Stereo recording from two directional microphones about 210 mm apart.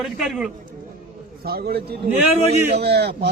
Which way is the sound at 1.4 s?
45° right (ahead or behind).